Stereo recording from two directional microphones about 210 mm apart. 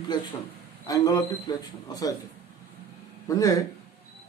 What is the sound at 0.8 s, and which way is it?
A man's voice, 20° left (ahead or behind).